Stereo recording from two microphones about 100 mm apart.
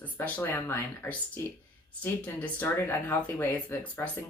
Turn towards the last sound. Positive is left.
turn(degrees=20)  # may be behind; listen again after turning